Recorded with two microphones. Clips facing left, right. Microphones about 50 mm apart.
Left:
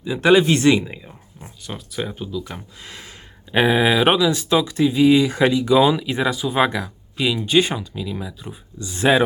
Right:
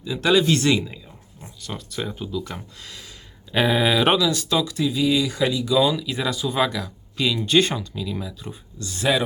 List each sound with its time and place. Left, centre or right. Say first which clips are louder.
0.0 s speech: left 4 dB; left
1.9 s speech: left 2 dB; centre
2.8 s a sound: left 3 dB; left
3.5 s speech: left 3 dB; centre
4.3 s speech: left 4 dB; left
6.2 s speech: left 3 dB; centre
6.6 s speech: left 4 dB; left
7.2 s speech: left 1 dB; centre
9.0 s a sound: left 5 dB; left